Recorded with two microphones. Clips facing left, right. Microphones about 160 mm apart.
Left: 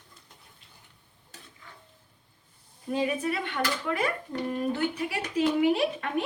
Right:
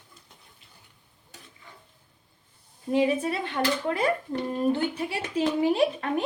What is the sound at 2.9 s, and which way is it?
Speech, 25° right (ahead or behind).